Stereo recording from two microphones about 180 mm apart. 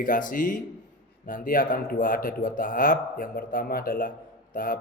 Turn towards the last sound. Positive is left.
turn(degrees=50)  # may be behind; listen again after turning